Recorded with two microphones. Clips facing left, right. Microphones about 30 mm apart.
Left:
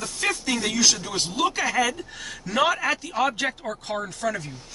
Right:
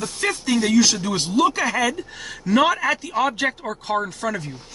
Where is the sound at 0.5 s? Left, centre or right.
Centre.